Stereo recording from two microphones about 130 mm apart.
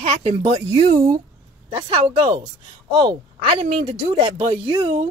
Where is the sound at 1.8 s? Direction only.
40° right (ahead or behind).